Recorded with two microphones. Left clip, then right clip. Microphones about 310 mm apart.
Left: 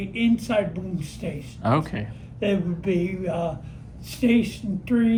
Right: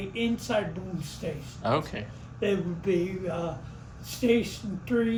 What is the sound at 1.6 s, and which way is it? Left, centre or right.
Speech, left.